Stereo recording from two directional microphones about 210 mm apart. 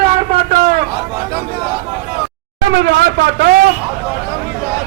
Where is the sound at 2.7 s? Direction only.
55° right (ahead or behind).